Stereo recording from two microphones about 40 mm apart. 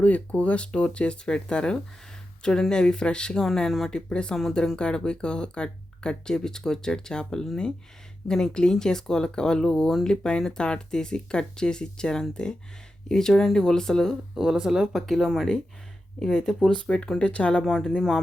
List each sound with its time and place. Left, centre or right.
0.0 s speech: left; by 14.2 s centre
14.3 s speech: centre
14.9 s speech: centre
16.2 s speech: centre
16.7 s speech: left
17.6 s speech: centre